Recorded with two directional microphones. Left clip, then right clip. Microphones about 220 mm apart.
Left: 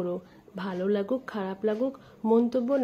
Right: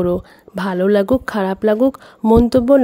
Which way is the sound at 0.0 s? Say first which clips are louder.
Right 14 dB; 50° right (ahead or behind).